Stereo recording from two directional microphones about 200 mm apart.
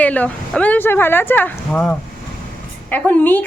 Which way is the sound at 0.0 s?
5° left (ahead or behind).